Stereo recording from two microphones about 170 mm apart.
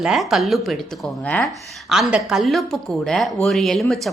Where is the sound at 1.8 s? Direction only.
5° right (ahead or behind).